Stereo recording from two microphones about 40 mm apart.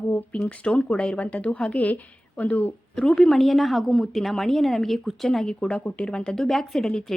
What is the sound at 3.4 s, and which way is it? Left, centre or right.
Speech, centre.